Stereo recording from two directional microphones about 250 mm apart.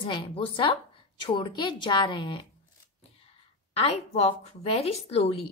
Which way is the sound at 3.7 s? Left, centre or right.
Left.